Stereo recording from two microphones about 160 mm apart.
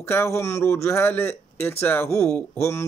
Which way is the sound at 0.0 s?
15° left (ahead or behind).